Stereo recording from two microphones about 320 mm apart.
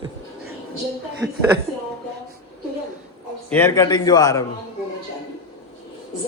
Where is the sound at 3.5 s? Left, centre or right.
Centre.